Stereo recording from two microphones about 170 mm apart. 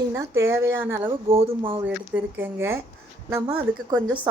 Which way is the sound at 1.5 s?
30° right (ahead or behind).